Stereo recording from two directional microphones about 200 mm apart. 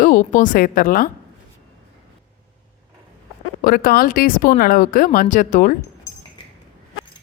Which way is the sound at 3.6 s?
50° left (ahead or behind).